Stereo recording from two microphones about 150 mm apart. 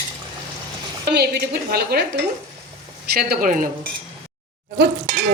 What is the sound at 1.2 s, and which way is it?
Speech, 90° right.